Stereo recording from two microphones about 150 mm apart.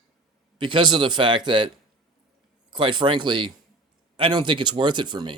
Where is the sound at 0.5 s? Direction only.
30° right (ahead or behind).